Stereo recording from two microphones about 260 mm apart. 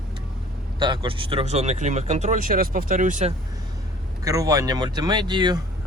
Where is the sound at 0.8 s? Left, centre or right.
Centre.